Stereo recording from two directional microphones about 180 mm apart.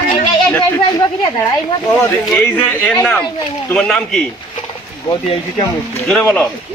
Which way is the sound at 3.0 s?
20° left (ahead or behind).